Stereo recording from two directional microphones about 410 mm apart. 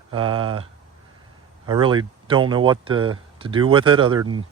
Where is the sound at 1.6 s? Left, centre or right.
Centre.